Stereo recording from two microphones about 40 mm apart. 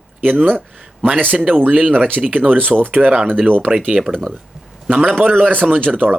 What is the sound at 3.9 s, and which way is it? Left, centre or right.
Speech, centre.